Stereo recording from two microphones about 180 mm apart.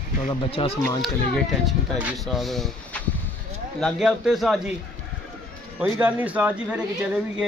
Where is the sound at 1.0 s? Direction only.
Centre (ahead or behind).